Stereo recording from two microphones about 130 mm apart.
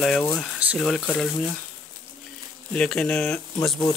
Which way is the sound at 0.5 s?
10° right (ahead or behind).